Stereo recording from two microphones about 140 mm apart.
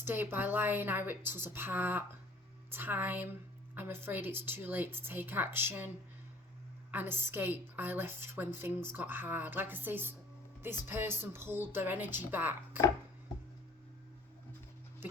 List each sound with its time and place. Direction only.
0.0 s a woman's voice: 15° right (ahead or behind)
6.9 s a woman's voice: 15° right (ahead or behind)